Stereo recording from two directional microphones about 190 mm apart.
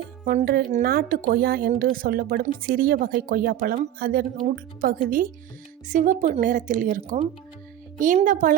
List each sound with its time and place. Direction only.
0.3 s speech: 50° right (ahead or behind)